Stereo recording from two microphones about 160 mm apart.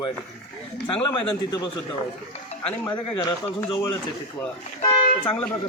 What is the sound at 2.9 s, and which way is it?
Speech, 30° left (ahead or behind).